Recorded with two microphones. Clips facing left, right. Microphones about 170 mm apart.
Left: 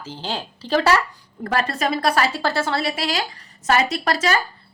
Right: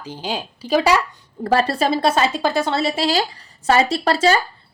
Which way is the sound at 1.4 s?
30° right (ahead or behind).